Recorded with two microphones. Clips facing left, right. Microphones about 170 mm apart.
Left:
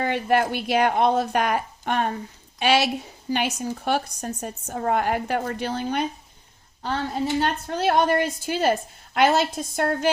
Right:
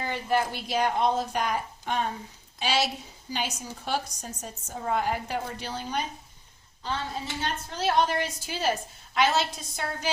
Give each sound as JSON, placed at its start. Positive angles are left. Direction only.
{"t": 0.0, "sound": "a woman's voice", "side_deg": 65}